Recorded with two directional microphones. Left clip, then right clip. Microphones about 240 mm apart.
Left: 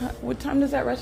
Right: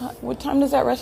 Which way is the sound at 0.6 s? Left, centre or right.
Right.